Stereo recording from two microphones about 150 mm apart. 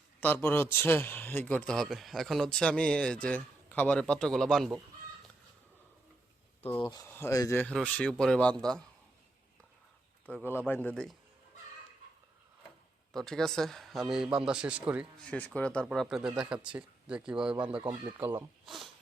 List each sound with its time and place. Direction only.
0.2 s a man's voice: 10° left (ahead or behind)
6.6 s speech: 10° left (ahead or behind)
6.8 s speech: 25° left (ahead or behind)
7.1 s a man's voice: 15° left (ahead or behind)
7.6 s a man's voice: 5° left (ahead or behind)
10.2 s a man's voice: 10° left (ahead or behind)
13.1 s speech: 5° left (ahead or behind)
15.3 s speech: 10° left (ahead or behind); by 17.8 s 5° right (ahead or behind)
17.8 s speech: 25° right (ahead or behind)
18.6 s speech: centre (ahead or behind)